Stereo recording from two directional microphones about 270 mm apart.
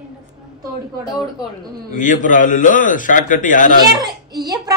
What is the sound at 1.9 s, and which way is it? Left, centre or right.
A man's voice, left.